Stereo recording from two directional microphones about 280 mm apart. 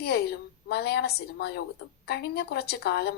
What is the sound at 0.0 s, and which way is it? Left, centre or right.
A woman's voice, left.